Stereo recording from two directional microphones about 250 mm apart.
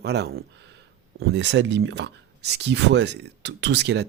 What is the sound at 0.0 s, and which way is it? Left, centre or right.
Speech, right.